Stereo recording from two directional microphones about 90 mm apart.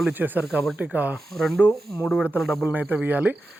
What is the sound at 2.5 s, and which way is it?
Speech, 10° right (ahead or behind).